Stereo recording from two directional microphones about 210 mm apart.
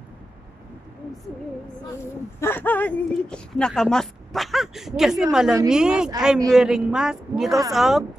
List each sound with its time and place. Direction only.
2.4 s speech: 10° left (ahead or behind)